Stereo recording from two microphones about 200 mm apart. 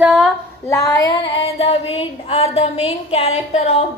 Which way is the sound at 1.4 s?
30° left (ahead or behind).